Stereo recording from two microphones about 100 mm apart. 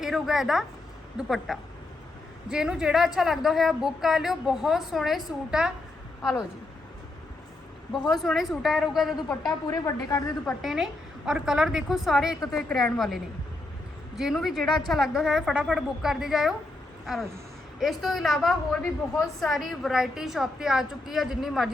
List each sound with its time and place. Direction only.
0.0 s a woman's voice: 5° right (ahead or behind)
7.9 s a woman's voice: centre (ahead or behind)
9.5 s speech: 35° left (ahead or behind)
10.4 s a woman's voice: centre (ahead or behind)
17.7 s a woman's voice: centre (ahead or behind)